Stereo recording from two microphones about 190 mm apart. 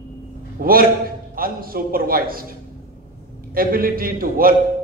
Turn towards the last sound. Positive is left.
turn(degrees=-50)  # may be behind; listen again after turning